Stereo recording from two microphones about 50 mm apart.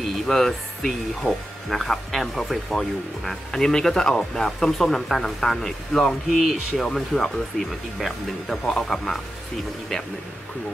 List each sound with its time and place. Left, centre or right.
0.3 s speech: centre